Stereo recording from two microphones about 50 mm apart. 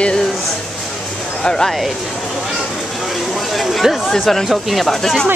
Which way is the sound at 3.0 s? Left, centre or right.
Centre.